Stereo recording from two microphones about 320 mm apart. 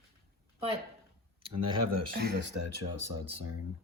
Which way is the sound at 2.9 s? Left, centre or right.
Right.